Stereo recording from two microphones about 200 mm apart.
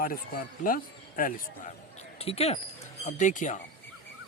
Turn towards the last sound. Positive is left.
turn(degrees=40)  # may be behind; listen again after turning